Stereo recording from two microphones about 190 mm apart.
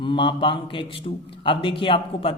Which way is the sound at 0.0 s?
25° left (ahead or behind).